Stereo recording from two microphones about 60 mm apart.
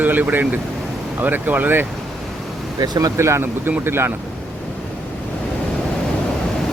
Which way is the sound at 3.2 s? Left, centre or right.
Right.